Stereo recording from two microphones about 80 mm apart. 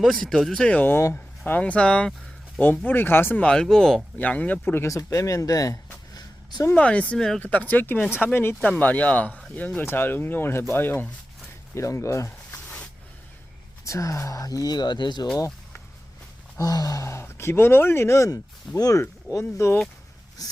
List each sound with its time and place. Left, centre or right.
0.0 s speech: centre
2.6 s speech: left
3.4 s speech: centre
4.2 s speech: centre
5.0 s speech: left
6.7 s speech: centre
7.4 s speech: left
13.8 s speech: left
16.6 s speech: left